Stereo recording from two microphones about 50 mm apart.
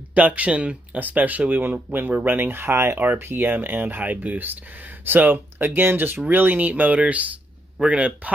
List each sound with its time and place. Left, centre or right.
0.1 s speech: right
0.9 s speech: right